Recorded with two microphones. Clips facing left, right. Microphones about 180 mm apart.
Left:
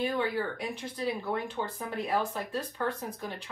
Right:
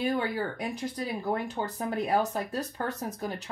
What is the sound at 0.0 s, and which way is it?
Speech, 40° right (ahead or behind).